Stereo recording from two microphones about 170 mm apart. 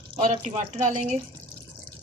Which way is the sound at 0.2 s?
40° right (ahead or behind).